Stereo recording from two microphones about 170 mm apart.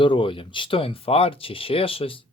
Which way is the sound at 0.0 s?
30° left (ahead or behind).